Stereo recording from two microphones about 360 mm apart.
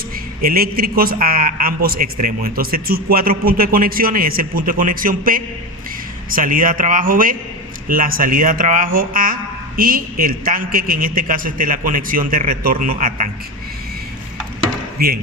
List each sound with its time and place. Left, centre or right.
0.4 s speech: right
14.9 s speech: right